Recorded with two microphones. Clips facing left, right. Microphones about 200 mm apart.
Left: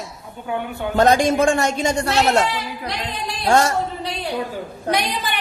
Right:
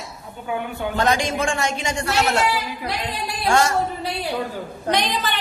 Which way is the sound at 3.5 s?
40° left (ahead or behind).